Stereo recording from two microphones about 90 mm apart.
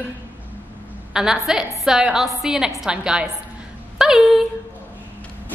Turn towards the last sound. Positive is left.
turn(degrees=-5)  # may be behind; listen again after turning